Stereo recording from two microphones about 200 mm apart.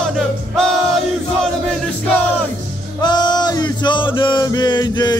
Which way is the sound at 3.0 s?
20° left (ahead or behind).